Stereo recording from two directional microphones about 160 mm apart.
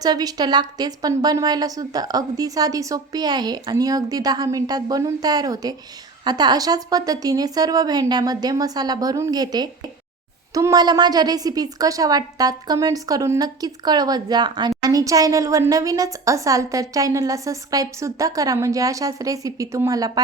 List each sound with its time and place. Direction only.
0.0 s a woman's voice: 25° right (ahead or behind)